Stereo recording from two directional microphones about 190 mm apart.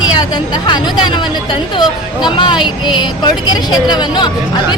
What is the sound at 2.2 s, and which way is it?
Speech, 25° left (ahead or behind).